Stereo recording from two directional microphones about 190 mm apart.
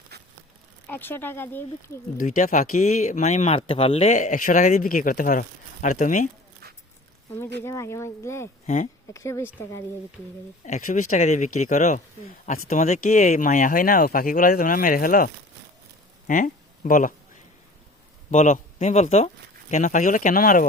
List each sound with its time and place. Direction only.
0.9 s speech: 10° left (ahead or behind)
2.1 s speech: 45° left (ahead or behind)
7.6 s speech: 15° left (ahead or behind)
8.6 s speech: 40° left (ahead or behind)
9.1 s speech: 15° left (ahead or behind)
10.6 s speech: 40° left (ahead or behind)
16.2 s a sound: 45° left (ahead or behind)
18.3 s a man's voice: 40° left (ahead or behind)